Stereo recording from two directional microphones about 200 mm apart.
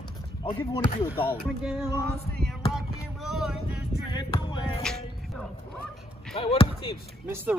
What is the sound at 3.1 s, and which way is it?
Boat, centre (ahead or behind).